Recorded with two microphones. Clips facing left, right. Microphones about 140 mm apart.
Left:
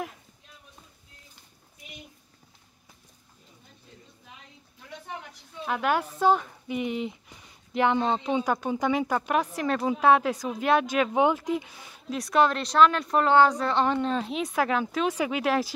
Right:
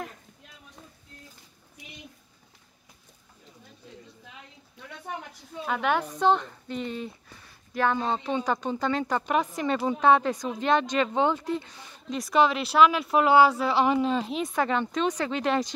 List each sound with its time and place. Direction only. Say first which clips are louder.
5.7 s speech: even; 5° left (ahead or behind)